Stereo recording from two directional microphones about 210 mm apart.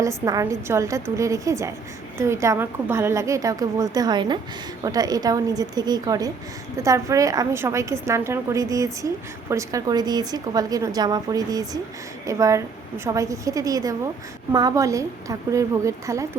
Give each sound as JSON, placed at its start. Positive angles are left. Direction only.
{"t": 0.3, "sound": "a woman's voice", "side_deg": -15}